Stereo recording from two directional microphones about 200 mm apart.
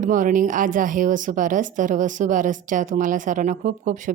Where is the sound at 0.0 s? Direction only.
40° right (ahead or behind).